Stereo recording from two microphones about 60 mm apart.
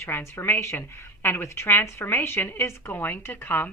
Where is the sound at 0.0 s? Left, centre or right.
Left.